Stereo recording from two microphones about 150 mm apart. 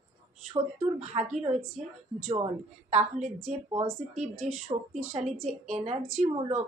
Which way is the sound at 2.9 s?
50° right (ahead or behind).